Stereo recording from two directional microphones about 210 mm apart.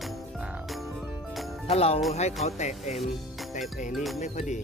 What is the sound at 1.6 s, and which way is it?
Speech, 30° left (ahead or behind).